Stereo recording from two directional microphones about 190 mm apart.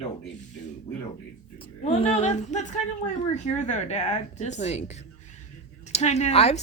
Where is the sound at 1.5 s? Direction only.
30° left (ahead or behind).